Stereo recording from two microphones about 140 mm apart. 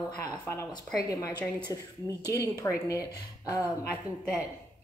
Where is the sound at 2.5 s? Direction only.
25° left (ahead or behind).